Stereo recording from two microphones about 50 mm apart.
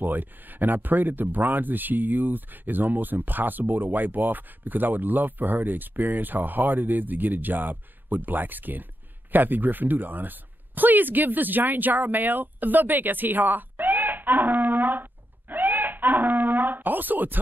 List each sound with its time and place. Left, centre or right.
0.0 s speech: right